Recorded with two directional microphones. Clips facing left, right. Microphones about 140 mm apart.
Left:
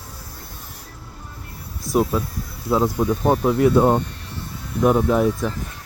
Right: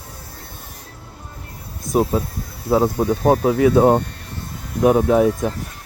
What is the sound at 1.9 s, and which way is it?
Speech, 40° right (ahead or behind).